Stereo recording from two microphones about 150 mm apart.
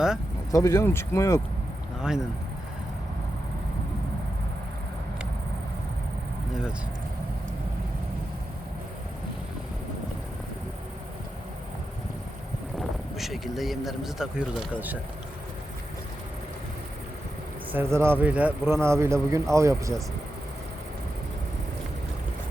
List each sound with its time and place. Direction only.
0.5 s speech: 15° left (ahead or behind)
2.0 s speech: 5° right (ahead or behind)
13.1 s speech: centre (ahead or behind)
17.7 s speech: 15° right (ahead or behind)